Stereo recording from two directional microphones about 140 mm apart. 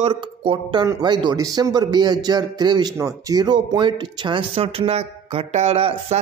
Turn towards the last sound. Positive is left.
turn(degrees=-45)  # may be behind; listen again after turning